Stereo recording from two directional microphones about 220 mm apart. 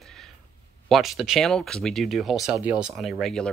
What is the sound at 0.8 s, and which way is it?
Speech, centre (ahead or behind).